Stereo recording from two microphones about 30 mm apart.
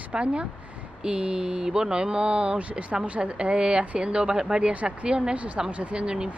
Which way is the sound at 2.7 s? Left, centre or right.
Right.